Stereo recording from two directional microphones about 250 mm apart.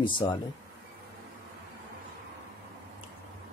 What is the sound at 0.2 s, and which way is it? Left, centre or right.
Speech, centre.